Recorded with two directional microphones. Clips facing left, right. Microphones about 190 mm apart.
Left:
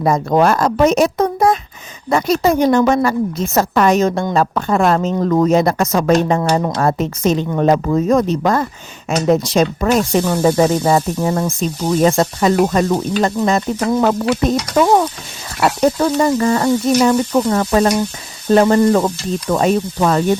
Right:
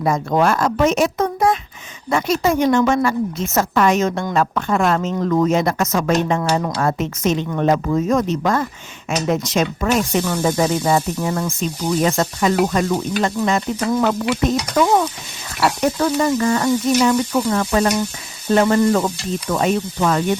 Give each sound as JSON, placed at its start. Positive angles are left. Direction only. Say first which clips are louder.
{"t": 0.0, "sound": "speech", "louder": "left 4 dB", "side_deg": 35}